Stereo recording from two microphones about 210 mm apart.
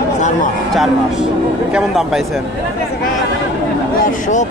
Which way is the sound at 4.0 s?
35° left (ahead or behind).